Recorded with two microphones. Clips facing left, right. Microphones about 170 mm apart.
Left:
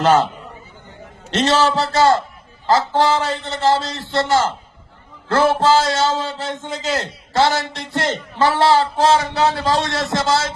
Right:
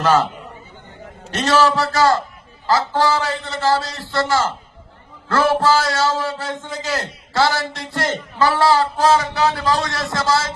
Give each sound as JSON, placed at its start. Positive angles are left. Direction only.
{"t": 0.0, "sound": "a man's voice", "side_deg": 25}
{"t": 1.3, "sound": "a man's voice", "side_deg": 25}